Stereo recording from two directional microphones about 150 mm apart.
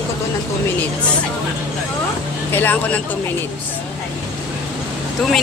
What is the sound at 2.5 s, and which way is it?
Speech, 10° left (ahead or behind).